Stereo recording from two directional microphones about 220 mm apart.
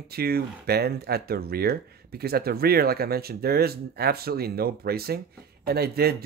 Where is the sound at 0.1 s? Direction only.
45° right (ahead or behind).